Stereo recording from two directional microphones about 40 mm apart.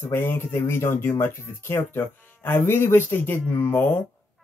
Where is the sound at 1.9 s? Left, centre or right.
Left.